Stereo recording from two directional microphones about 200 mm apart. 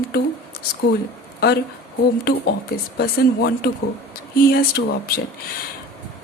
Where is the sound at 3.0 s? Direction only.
55° left (ahead or behind).